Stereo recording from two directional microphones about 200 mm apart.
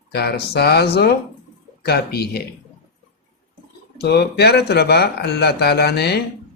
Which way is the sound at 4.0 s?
55° left (ahead or behind).